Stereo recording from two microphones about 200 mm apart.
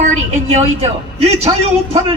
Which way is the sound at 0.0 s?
35° right (ahead or behind).